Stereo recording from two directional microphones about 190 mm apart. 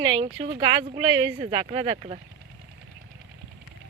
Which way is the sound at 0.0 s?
25° right (ahead or behind).